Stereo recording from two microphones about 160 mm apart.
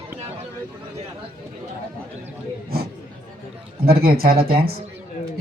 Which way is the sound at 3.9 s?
70° right (ahead or behind).